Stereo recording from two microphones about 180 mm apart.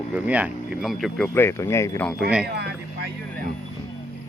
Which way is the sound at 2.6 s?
65° right (ahead or behind).